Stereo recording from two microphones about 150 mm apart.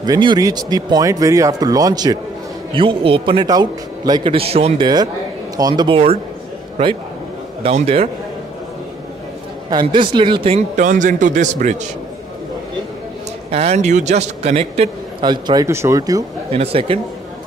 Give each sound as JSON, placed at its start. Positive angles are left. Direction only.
{"t": 0.0, "sound": "speech", "side_deg": -30}
{"t": 2.7, "sound": "a man's voice", "side_deg": -35}
{"t": 4.8, "sound": "a man's voice", "side_deg": -25}
{"t": 9.7, "sound": "a man's voice", "side_deg": -30}
{"t": 10.8, "sound": "a man's voice", "side_deg": -60}
{"t": 13.5, "sound": "a man's voice", "side_deg": -45}
{"t": 15.2, "sound": "speech", "side_deg": -30}
{"t": 16.4, "sound": "a man's voice", "side_deg": -40}